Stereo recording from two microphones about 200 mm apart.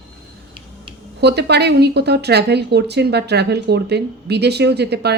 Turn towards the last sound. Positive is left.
turn(degrees=-55)  # may be behind; listen again after turning